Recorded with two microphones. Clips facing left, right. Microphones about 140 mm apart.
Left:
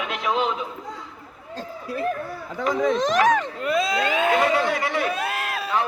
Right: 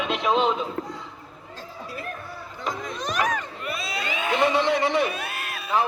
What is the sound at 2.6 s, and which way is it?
Speech, 90° left.